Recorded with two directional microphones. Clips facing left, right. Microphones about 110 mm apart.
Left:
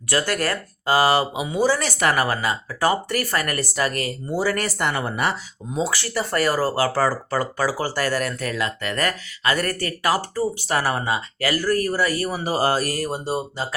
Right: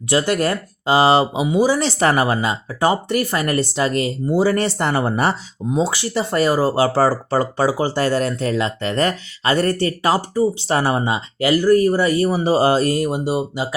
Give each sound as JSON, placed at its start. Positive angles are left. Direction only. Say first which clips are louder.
{"t": 0.1, "sound": "speech", "louder": "right 5 dB", "side_deg": -20}
{"t": 1.5, "sound": "speech", "louder": "right 3 dB", "side_deg": -15}
{"t": 10.2, "sound": "speech", "louder": "right 6 dB", "side_deg": -15}
{"t": 10.6, "sound": "speech", "louder": "right 4 dB", "side_deg": -25}